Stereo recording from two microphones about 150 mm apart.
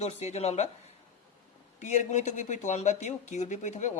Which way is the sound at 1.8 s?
50° left (ahead or behind).